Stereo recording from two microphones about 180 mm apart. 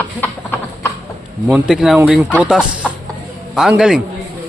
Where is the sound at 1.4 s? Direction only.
5° right (ahead or behind).